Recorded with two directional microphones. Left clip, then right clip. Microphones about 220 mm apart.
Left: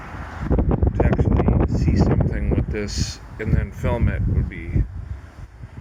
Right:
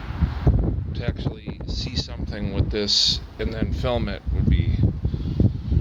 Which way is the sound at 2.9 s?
50° right (ahead or behind).